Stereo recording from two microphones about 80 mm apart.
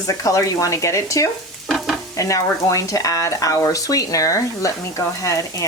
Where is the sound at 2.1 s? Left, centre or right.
Left.